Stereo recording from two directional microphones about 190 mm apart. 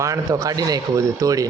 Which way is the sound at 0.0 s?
15° right (ahead or behind).